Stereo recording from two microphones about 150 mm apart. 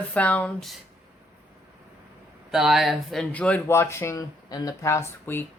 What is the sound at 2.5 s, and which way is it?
Speech, centre (ahead or behind).